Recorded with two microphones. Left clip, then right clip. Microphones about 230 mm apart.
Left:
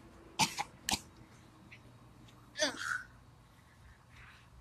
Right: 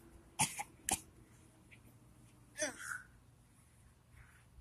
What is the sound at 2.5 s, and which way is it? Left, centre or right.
Babbling, right.